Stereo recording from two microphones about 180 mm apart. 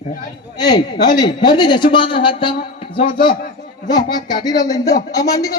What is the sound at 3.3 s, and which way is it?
Speech, 55° left (ahead or behind).